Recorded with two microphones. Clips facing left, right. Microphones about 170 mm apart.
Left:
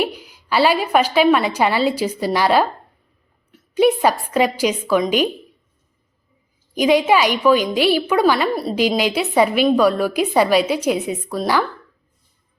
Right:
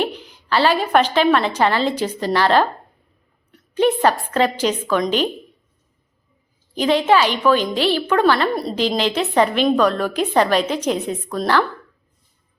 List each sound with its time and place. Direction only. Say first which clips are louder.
0.0 s a woman's voice: left 1 dB; 10° left (ahead or behind)
6.7 s a woman's voice: left 1 dB; 10° left (ahead or behind)